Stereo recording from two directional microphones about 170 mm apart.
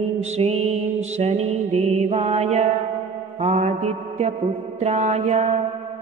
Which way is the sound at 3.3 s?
40° right (ahead or behind).